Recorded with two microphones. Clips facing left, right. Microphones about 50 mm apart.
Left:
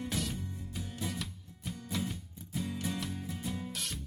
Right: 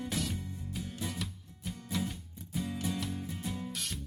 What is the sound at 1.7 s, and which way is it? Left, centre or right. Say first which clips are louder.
Music: right 1 dB; centre.